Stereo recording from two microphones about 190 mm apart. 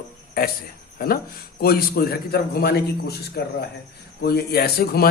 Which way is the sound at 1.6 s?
55° left (ahead or behind).